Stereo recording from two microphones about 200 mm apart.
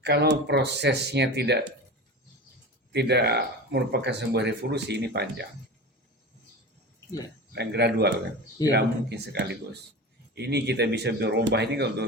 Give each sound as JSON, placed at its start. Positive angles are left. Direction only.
{"t": 0.0, "sound": "speech", "side_deg": -55}
{"t": 2.9, "sound": "speech", "side_deg": -55}
{"t": 7.5, "sound": "speech", "side_deg": -55}